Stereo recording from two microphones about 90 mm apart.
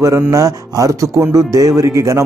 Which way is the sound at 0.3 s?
40° right (ahead or behind).